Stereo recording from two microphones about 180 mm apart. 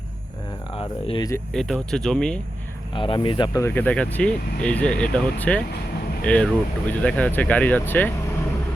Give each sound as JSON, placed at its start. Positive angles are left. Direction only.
{"t": 0.8, "sound": "speech", "side_deg": 30}
{"t": 1.5, "sound": "speech", "side_deg": 0}
{"t": 2.9, "sound": "speech", "side_deg": 30}